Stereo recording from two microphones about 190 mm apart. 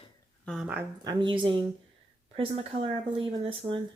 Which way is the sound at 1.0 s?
25° right (ahead or behind).